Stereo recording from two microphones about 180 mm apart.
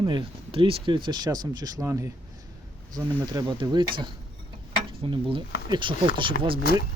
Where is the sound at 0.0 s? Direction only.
25° right (ahead or behind).